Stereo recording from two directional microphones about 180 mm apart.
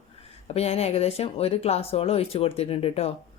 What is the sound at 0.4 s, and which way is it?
Speech, 35° left (ahead or behind).